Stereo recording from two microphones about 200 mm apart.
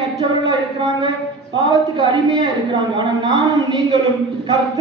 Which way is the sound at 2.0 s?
20° right (ahead or behind).